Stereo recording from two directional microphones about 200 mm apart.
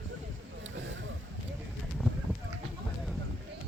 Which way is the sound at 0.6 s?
70° right (ahead or behind).